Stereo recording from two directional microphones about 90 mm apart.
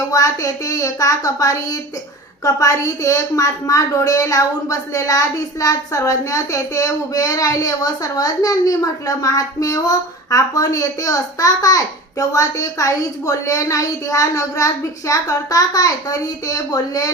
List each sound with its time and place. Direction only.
0.1 s a woman's voice: 40° left (ahead or behind)